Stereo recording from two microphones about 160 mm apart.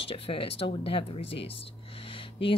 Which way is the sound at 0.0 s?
35° left (ahead or behind).